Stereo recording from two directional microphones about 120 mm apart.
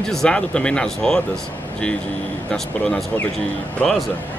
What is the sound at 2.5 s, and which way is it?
Speech, 5° left (ahead or behind).